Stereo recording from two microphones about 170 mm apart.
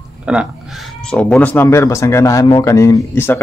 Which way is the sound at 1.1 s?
5° left (ahead or behind).